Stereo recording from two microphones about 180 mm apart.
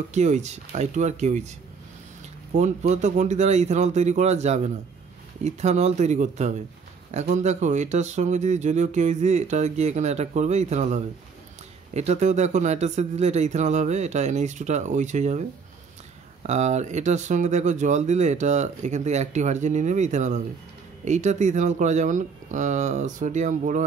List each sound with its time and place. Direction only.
0.1 s speech: 40° right (ahead or behind)
2.5 s speech: 40° right (ahead or behind)
16.4 s speech: 40° right (ahead or behind)